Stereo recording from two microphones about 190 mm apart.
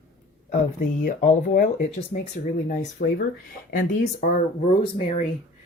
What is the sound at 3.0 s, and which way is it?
Speech, 45° left (ahead or behind).